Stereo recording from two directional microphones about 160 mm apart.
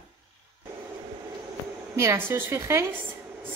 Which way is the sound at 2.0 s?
15° right (ahead or behind).